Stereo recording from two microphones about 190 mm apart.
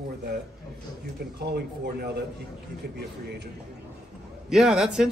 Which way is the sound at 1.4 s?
60° right (ahead or behind).